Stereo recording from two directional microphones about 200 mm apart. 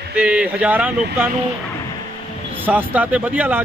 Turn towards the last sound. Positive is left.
turn(degrees=-10)  # may be behind; listen again after turning